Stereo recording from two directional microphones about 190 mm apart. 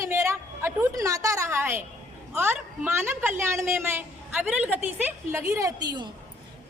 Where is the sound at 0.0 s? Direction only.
15° right (ahead or behind).